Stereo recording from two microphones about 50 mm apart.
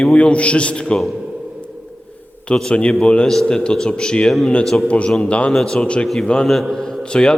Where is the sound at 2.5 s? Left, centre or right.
Centre.